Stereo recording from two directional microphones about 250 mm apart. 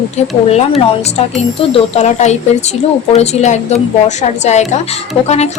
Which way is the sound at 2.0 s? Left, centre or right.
Left.